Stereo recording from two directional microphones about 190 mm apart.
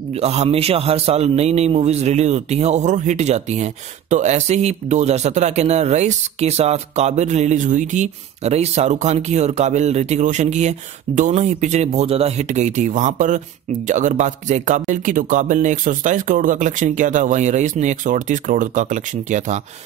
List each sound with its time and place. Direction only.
0.1 s a man's voice: 35° right (ahead or behind)